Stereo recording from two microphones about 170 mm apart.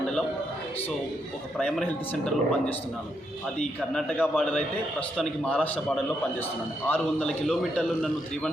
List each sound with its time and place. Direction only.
1.5 s a man's voice: 5° left (ahead or behind)